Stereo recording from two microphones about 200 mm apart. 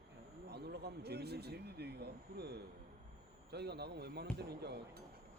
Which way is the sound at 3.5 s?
55° right (ahead or behind).